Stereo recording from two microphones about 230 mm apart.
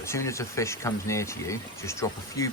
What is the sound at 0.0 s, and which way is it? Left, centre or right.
Speech, centre.